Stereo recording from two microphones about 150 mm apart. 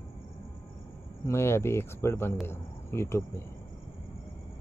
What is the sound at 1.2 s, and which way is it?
Speech, 15° left (ahead or behind).